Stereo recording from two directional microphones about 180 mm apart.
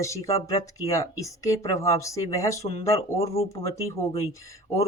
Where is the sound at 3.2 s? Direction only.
35° left (ahead or behind).